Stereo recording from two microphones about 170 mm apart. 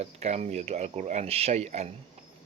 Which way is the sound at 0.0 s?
40° right (ahead or behind).